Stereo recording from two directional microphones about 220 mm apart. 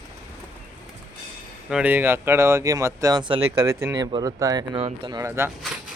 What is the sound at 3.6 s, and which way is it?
Speech, 10° right (ahead or behind).